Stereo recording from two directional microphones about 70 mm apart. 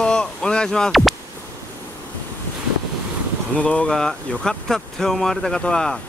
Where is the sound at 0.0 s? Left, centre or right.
Centre.